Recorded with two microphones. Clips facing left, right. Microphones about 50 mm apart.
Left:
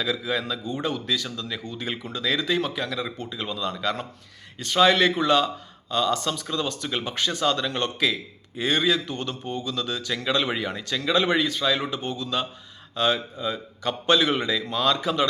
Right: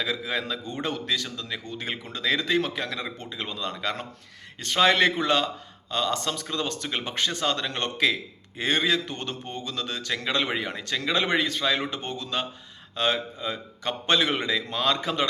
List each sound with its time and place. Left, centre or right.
0.0 s a man's voice: right